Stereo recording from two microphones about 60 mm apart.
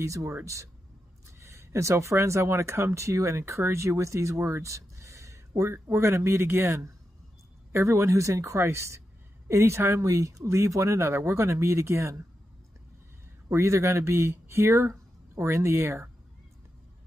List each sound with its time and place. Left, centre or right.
0.0 s speech: right
1.4 s speech: right
13.5 s speech: right